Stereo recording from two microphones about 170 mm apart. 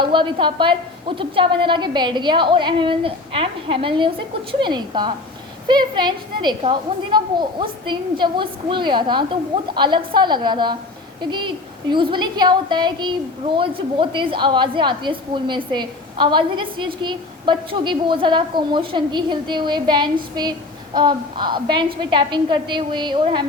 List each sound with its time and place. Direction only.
0.0 s a woman's voice: 30° right (ahead or behind)